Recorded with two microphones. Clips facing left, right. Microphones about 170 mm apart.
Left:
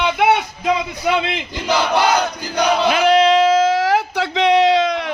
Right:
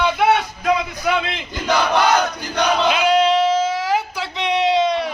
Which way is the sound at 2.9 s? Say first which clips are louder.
Left 4 dB; 65° left (ahead or behind).